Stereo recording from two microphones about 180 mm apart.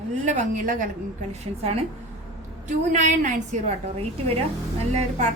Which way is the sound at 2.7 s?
45° right (ahead or behind).